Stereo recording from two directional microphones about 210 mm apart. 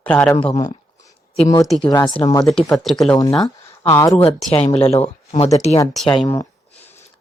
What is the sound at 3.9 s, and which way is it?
Speech, 15° left (ahead or behind).